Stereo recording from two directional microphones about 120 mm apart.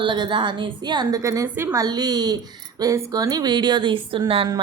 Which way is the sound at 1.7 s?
35° right (ahead or behind).